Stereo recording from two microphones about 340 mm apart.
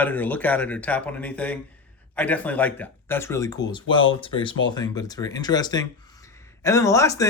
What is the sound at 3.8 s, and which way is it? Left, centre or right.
Speech, left.